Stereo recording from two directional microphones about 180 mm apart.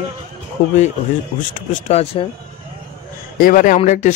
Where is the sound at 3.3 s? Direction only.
50° left (ahead or behind).